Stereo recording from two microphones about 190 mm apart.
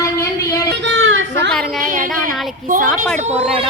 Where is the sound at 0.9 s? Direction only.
90° right.